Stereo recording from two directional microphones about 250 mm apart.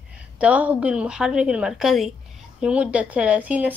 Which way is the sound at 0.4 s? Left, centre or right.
Centre.